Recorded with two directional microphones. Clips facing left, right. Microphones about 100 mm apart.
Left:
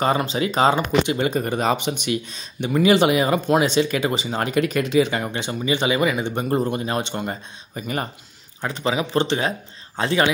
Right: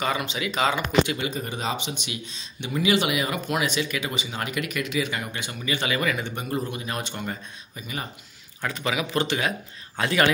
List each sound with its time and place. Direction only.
0.0 s speech: 35° left (ahead or behind)
1.3 s speech: 55° left (ahead or behind); by 6.3 s 20° left (ahead or behind)
6.3 s speech: 40° left (ahead or behind)
7.0 s speech: 25° left (ahead or behind)
7.7 s speech: 50° left (ahead or behind)
8.5 s speech: 30° left (ahead or behind)